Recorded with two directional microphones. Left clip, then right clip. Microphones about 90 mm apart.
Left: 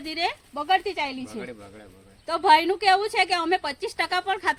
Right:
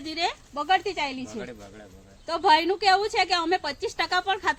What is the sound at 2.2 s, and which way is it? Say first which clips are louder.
A woman's voice: left 2 dB; 35° left (ahead or behind).